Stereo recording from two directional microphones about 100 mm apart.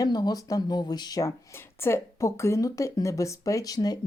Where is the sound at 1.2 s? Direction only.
25° left (ahead or behind).